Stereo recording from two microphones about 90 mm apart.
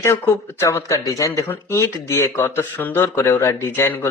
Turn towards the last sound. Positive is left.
turn(degrees=30)  # may be behind; listen again after turning